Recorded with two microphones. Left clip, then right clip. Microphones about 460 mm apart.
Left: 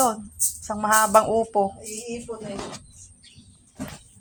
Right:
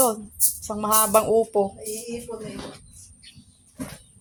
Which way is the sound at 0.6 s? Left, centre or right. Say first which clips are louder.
Left 2 dB; right.